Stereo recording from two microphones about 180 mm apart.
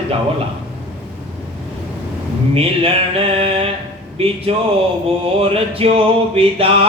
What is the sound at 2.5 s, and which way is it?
Speech, 30° right (ahead or behind).